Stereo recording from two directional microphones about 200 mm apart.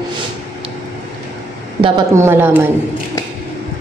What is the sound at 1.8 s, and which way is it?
Speech, 15° right (ahead or behind).